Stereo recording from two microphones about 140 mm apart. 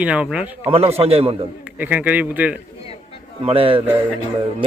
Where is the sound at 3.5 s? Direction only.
40° right (ahead or behind).